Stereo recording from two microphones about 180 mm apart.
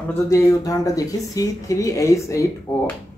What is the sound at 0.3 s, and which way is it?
Speech, 15° left (ahead or behind).